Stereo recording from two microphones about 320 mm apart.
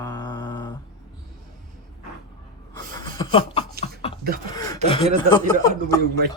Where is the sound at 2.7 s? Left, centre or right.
Centre.